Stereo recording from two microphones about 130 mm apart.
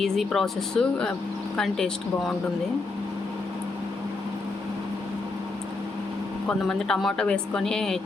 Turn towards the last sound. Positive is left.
turn(degrees=5)  # may be behind; listen again after turning